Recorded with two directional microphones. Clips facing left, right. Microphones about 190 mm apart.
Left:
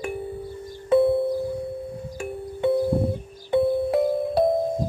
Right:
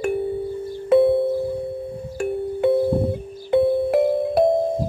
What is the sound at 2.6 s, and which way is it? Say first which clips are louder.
Music: right 2 dB; 5° right (ahead or behind).